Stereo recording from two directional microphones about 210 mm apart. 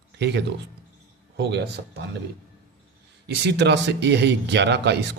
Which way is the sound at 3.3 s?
55° right (ahead or behind).